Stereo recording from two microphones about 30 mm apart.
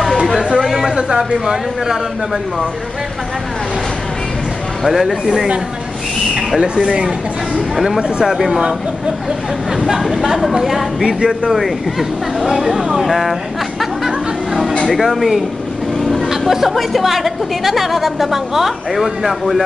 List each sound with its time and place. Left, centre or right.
0.6 s a sound: centre
0.9 s a sound: right
1.4 s a woman's voice: centre
4.8 s a woman's voice: centre
6.8 s speech: right
7.7 s a woman's voice: centre
8.0 s speech: right
10.0 s a woman's voice: centre
14.0 s chatter: centre
14.9 s a woman's voice: centre
16.3 s music: centre
16.7 s a woman's voice: centre